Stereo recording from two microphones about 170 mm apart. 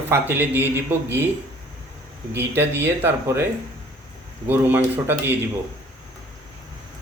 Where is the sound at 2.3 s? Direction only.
10° right (ahead or behind).